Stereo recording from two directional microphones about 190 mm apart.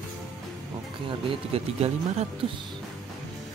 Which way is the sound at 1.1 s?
30° right (ahead or behind).